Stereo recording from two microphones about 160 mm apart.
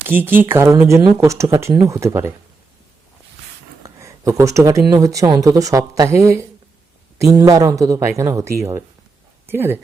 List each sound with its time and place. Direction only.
0.1 s speech: 10° right (ahead or behind)
3.8 s speech: 20° right (ahead or behind)